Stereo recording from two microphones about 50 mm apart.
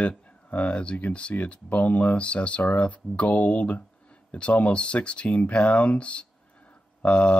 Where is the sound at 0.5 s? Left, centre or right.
Left.